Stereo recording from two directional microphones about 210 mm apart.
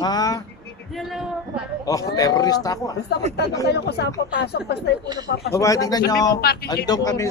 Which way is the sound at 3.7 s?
50° left (ahead or behind).